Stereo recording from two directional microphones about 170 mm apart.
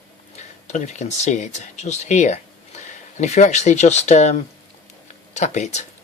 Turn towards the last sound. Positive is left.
turn(degrees=45)  # may be behind; listen again after turning